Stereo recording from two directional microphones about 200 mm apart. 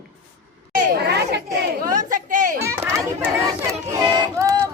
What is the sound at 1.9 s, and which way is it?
Chatter, 40° right (ahead or behind).